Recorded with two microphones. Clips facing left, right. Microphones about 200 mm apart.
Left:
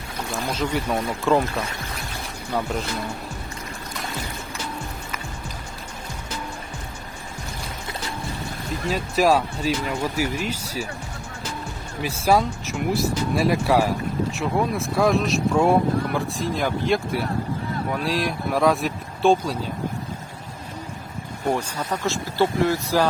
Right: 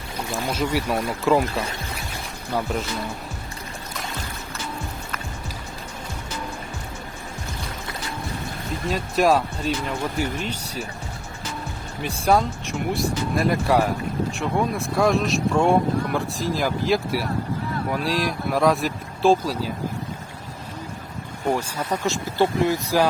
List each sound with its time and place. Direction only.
0.3 s speech: 5° right (ahead or behind)
8.9 s speech: centre (ahead or behind)
12.0 s speech: 5° left (ahead or behind)
22.0 s speech: 15° right (ahead or behind)